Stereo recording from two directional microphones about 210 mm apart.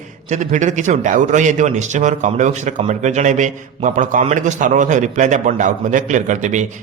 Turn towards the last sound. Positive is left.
turn(degrees=-35)  # may be behind; listen again after turning